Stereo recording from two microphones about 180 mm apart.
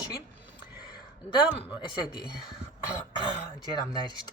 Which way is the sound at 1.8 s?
25° left (ahead or behind).